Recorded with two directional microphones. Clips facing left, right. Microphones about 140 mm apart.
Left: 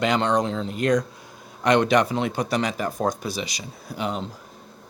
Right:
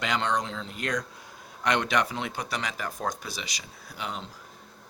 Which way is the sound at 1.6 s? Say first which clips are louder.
Left 7 dB; 40° left (ahead or behind).